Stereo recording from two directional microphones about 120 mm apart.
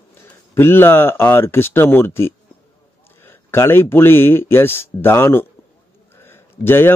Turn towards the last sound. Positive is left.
turn(degrees=20)  # may be behind; listen again after turning